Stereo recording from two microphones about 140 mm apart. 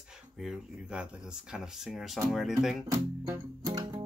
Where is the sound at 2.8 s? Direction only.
20° right (ahead or behind).